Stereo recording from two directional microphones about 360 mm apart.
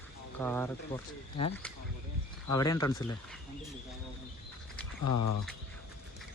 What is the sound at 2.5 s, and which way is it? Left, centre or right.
Speech, centre.